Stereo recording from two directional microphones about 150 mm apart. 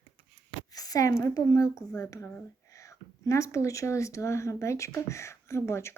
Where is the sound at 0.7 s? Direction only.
25° left (ahead or behind).